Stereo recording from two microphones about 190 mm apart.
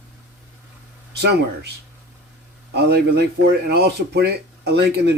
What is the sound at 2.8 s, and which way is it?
Speech, 60° right (ahead or behind).